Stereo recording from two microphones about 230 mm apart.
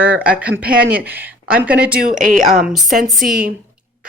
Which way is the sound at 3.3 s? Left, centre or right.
Right.